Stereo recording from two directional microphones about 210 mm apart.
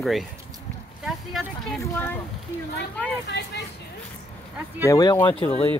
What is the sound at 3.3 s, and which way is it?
Speech, 55° left (ahead or behind).